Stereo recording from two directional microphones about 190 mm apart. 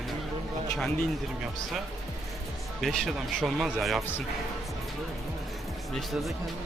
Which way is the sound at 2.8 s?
Centre (ahead or behind).